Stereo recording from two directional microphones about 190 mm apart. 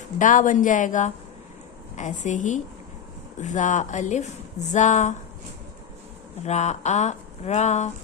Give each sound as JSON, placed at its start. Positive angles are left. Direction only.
{"t": 0.2, "sound": "speech", "side_deg": 40}
{"t": 6.4, "sound": "speech", "side_deg": 35}